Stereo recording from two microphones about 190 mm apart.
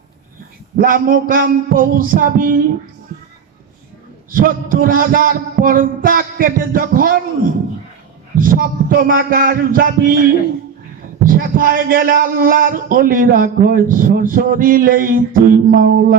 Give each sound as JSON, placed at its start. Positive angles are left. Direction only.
{"t": 0.8, "sound": "a man's voice", "side_deg": -50}
{"t": 4.3, "sound": "a man's voice", "side_deg": -45}
{"t": 8.4, "sound": "a man's voice", "side_deg": -45}
{"t": 11.2, "sound": "a man's voice", "side_deg": -50}